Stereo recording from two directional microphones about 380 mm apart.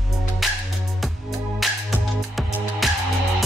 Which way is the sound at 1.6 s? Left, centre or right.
Centre.